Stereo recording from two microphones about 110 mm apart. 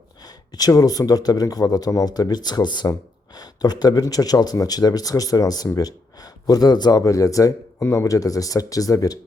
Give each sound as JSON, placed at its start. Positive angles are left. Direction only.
{"t": 0.2, "sound": "speech", "side_deg": 35}